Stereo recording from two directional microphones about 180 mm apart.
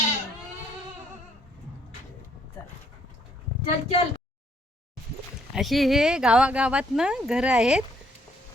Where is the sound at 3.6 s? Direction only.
35° left (ahead or behind).